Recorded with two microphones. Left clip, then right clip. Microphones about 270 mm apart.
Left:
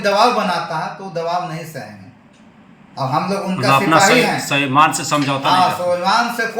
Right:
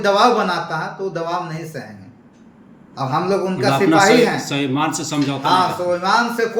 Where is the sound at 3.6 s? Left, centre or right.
Centre.